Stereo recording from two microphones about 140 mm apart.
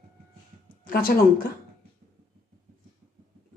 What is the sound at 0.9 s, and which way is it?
Speech, 90° left.